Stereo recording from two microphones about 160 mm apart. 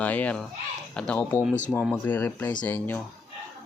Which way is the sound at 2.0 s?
10° left (ahead or behind).